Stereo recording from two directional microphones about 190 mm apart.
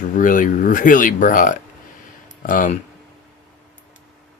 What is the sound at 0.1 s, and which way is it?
Speech, 45° left (ahead or behind).